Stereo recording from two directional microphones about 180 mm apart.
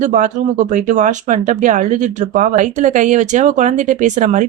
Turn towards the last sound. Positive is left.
turn(degrees=-45)  # may be behind; listen again after turning